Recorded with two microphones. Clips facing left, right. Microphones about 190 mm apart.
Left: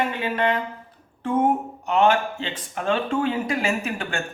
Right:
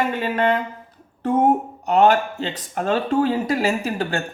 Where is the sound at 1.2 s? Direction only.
40° right (ahead or behind).